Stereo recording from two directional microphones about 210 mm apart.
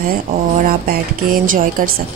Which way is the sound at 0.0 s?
40° right (ahead or behind).